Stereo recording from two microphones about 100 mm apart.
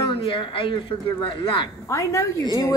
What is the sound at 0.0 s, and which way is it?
Speech, 55° left (ahead or behind).